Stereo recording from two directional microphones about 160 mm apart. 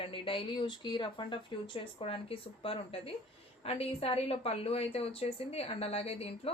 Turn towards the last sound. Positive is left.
turn(degrees=40)  # may be behind; listen again after turning